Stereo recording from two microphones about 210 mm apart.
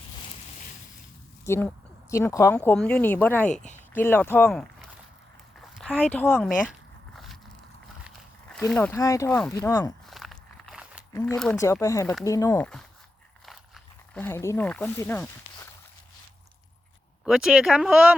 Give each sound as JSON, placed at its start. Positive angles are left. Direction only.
{"t": 1.5, "sound": "speech", "side_deg": 10}
{"t": 3.5, "sound": "speech", "side_deg": 35}
{"t": 3.9, "sound": "speech", "side_deg": 10}
{"t": 8.0, "sound": "speech", "side_deg": 5}
{"t": 10.1, "sound": "walk", "side_deg": 0}
{"t": 11.1, "sound": "speech", "side_deg": 15}
{"t": 14.1, "sound": "speech", "side_deg": 10}
{"t": 17.2, "sound": "speech", "side_deg": 0}